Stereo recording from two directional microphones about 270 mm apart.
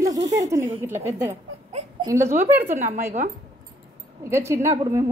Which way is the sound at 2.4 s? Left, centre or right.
Right.